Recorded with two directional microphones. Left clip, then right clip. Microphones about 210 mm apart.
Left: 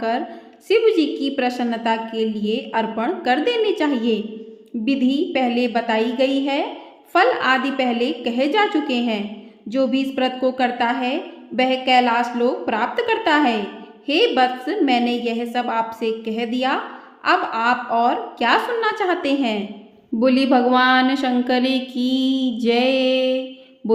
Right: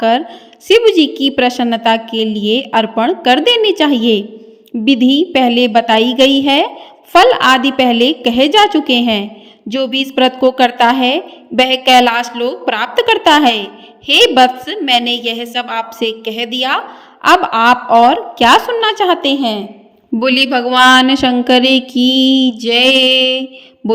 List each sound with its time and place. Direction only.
0.7 s a woman's voice: 35° right (ahead or behind)
20.1 s a woman's voice: 40° right (ahead or behind)